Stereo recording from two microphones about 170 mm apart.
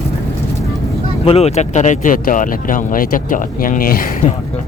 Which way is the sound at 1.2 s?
35° left (ahead or behind).